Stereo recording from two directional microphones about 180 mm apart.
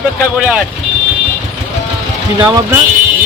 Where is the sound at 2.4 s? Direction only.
20° right (ahead or behind).